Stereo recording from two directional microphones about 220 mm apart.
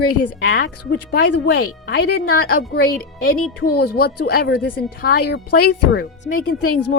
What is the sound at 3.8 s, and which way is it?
A woman's voice, 45° left (ahead or behind).